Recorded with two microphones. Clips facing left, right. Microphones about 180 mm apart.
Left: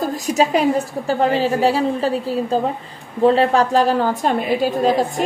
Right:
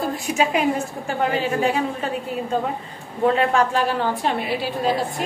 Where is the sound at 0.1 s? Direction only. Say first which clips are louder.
Left 4 dB; 40° left (ahead or behind).